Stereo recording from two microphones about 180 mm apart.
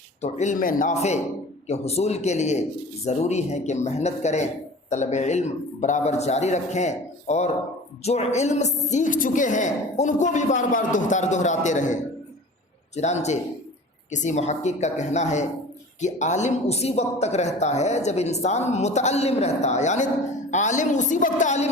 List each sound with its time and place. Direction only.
0.2 s a woman's voice: 40° left (ahead or behind)
13.0 s a woman's voice: 40° left (ahead or behind)